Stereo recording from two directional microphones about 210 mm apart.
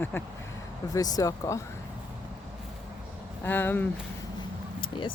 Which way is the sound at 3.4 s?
10° left (ahead or behind).